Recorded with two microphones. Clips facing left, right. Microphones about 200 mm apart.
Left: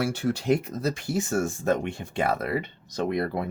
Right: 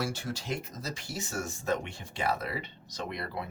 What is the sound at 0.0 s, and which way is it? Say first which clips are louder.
Speech: left 8 dB; 60° left (ahead or behind).